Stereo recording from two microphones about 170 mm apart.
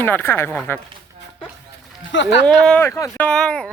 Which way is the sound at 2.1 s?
90° left.